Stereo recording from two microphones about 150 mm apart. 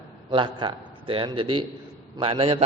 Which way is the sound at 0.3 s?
30° right (ahead or behind).